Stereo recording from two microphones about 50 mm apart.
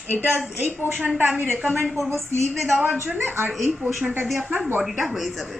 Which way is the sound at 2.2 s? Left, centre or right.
Right.